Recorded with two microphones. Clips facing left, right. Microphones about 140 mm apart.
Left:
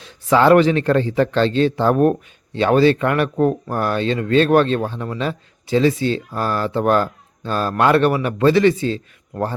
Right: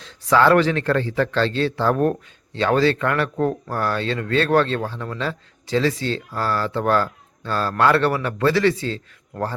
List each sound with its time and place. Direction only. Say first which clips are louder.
0.0 s a man's voice: left 2 dB; 15° left (ahead or behind)